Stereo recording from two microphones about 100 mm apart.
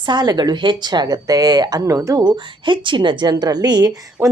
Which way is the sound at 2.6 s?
55° right (ahead or behind).